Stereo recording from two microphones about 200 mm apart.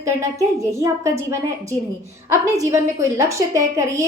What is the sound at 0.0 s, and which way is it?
A woman's voice, 15° right (ahead or behind).